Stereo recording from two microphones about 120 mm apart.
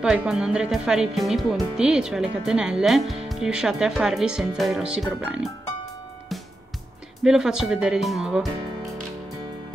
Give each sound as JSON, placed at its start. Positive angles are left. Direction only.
{"t": 0.3, "sound": "speech", "side_deg": -5}
{"t": 7.2, "sound": "speech", "side_deg": -5}